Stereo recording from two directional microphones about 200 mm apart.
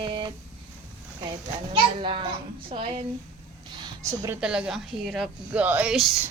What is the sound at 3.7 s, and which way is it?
Speech, 15° right (ahead or behind).